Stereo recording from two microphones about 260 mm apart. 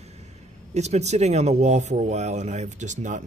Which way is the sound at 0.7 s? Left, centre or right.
Right.